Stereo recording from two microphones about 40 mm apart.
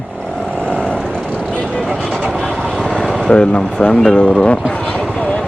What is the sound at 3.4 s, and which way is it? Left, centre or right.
Speech, left.